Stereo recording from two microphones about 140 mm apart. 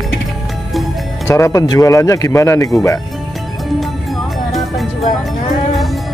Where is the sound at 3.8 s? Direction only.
Centre (ahead or behind).